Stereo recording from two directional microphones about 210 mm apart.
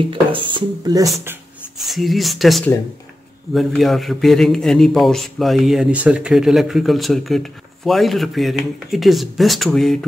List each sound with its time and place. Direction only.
0.1 s speech: 25° right (ahead or behind)
1.8 s a man's voice: centre (ahead or behind)